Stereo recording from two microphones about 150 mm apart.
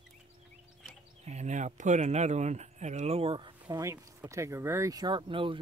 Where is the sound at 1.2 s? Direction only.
50° right (ahead or behind).